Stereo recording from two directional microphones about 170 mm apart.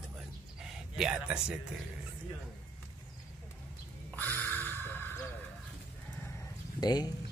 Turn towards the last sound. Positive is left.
turn(degrees=25)  # may be behind; listen again after turning